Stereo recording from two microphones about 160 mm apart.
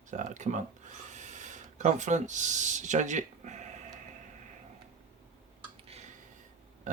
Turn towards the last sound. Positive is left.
turn(degrees=-40)  # may be behind; listen again after turning